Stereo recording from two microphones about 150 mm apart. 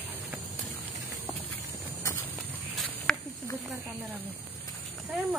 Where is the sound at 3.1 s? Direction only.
5° left (ahead or behind).